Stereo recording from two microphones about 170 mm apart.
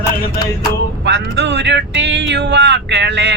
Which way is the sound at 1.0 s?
90° right.